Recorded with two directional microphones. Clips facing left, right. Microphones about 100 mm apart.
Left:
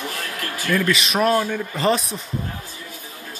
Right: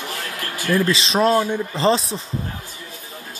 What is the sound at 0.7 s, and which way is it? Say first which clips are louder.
Speech: right 2 dB; 30° right (ahead or behind).